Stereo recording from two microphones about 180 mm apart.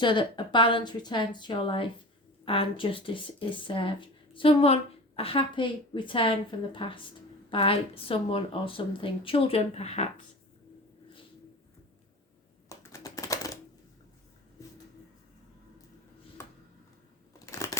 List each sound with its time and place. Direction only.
0.0 s a woman's voice: 25° left (ahead or behind)
12.6 s typing: 15° left (ahead or behind)
17.4 s a sound: 15° left (ahead or behind)